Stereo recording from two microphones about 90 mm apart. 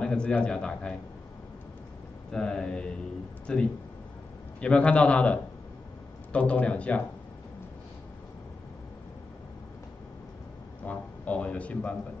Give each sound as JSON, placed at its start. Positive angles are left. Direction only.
{"t": 0.0, "sound": "a man's voice", "side_deg": 10}
{"t": 2.3, "sound": "a man's voice", "side_deg": 10}
{"t": 10.9, "sound": "speech", "side_deg": 15}